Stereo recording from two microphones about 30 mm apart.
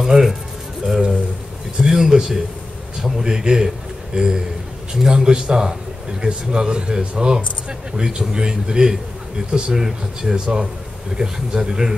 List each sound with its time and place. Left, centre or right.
0.0 s speech: centre
1.8 s a man's voice: centre
10.3 s a man's voice: right